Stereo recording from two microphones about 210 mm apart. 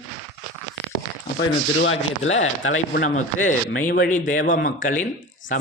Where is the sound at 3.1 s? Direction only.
35° left (ahead or behind).